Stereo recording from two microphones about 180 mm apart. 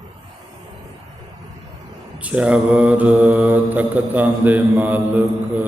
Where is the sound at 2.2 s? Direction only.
5° right (ahead or behind).